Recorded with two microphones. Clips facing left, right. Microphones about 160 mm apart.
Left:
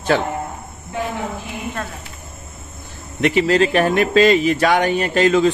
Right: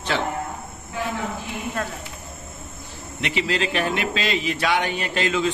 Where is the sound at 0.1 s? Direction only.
50° left (ahead or behind).